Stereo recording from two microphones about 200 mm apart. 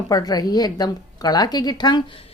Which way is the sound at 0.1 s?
20° left (ahead or behind).